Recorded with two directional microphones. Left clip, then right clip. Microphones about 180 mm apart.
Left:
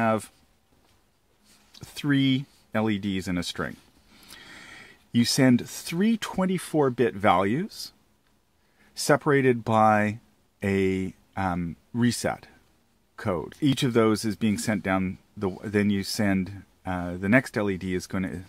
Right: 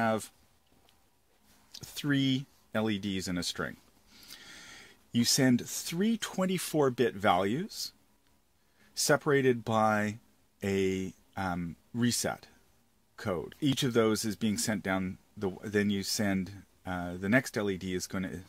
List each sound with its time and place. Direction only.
0.0 s speech: 25° left (ahead or behind)
1.8 s speech: 25° left (ahead or behind)
6.4 s speech: 20° left (ahead or behind)
8.9 s speech: 30° left (ahead or behind)